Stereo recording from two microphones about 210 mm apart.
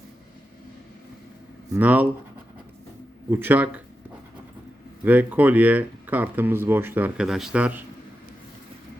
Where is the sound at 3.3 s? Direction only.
10° right (ahead or behind).